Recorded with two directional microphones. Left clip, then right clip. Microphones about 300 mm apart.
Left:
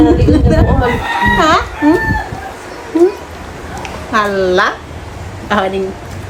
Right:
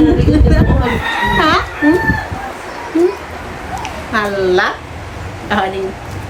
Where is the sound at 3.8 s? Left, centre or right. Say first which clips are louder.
Left 3 dB; centre.